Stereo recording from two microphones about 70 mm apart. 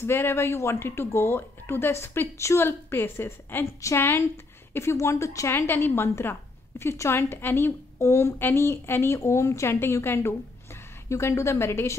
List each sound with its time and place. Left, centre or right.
0.0 s speech: left
4.7 s a woman's voice: left
8.0 s a woman's voice: left
8.4 s speech: left